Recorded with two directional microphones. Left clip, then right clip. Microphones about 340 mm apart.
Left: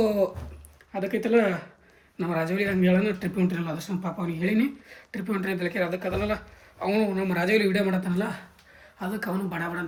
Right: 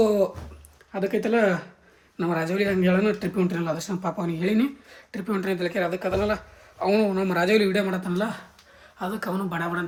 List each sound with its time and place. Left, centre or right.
0.0 s speech: centre